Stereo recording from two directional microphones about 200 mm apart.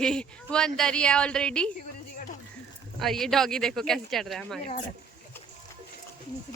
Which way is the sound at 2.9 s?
Centre (ahead or behind).